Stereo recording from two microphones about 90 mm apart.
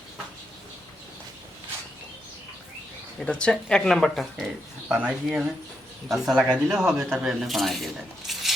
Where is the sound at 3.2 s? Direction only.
10° left (ahead or behind).